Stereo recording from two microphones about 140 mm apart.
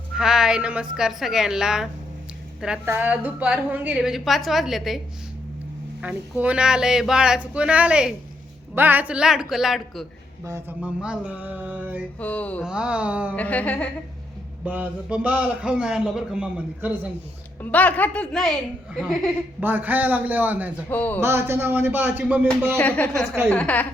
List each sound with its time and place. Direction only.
0.2 s a woman's voice: 5° right (ahead or behind)
6.0 s a man's voice: 10° right (ahead or behind)
10.4 s speech: 20° right (ahead or behind)
10.8 s a man's voice: 5° right (ahead or behind)
12.2 s a woman's voice: 10° left (ahead or behind)
12.6 s a man's voice: 5° right (ahead or behind)
13.3 s a woman's voice: 10° left (ahead or behind)
14.6 s a man's voice: 10° right (ahead or behind)
17.6 s a woman's voice: 10° left (ahead or behind)
19.5 s a man's voice: 15° right (ahead or behind)
20.9 s a woman's voice: 10° left (ahead or behind)
21.2 s a man's voice: 15° right (ahead or behind)
22.8 s a woman's voice: 10° left (ahead or behind)